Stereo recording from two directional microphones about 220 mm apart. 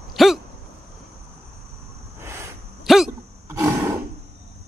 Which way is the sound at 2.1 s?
10° right (ahead or behind).